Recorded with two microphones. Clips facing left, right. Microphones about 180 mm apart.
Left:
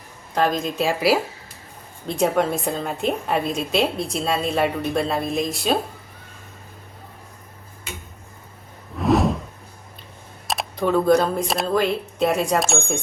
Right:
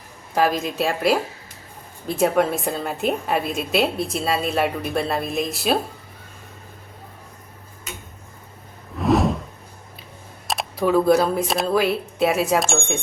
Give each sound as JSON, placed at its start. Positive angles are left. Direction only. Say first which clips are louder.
{"t": 0.3, "sound": "a woman's voice", "louder": "right 1 dB", "side_deg": -5}
{"t": 9.0, "sound": "a sound", "louder": "even", "side_deg": 0}
{"t": 10.4, "sound": "a woman's voice", "louder": "right 1 dB", "side_deg": 0}